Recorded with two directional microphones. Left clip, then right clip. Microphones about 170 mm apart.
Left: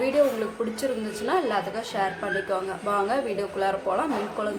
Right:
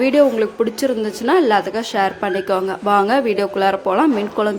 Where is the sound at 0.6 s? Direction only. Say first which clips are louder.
Right 10 dB; 50° right (ahead or behind).